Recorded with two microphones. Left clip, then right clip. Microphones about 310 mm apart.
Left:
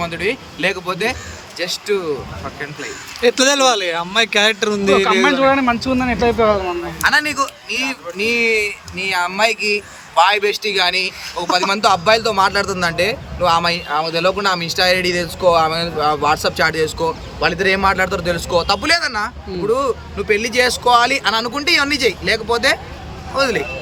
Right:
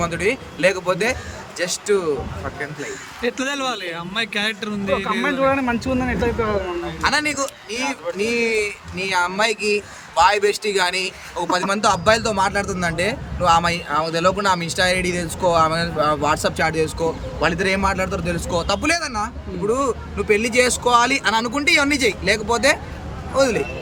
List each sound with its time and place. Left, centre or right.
0.0 s speech: centre
3.2 s speech: centre
7.0 s speech: centre